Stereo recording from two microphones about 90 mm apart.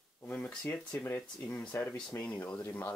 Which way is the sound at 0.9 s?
20° left (ahead or behind).